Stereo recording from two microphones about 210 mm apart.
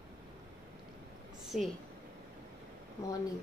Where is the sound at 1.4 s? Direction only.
Centre (ahead or behind).